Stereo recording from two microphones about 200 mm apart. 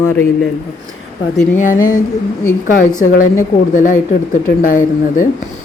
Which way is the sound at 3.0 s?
40° left (ahead or behind).